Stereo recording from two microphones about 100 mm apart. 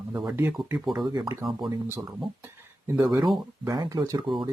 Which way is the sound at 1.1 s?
40° right (ahead or behind).